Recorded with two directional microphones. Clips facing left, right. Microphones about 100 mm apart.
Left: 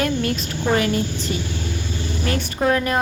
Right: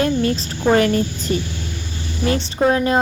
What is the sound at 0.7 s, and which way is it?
Speech, 45° right (ahead or behind).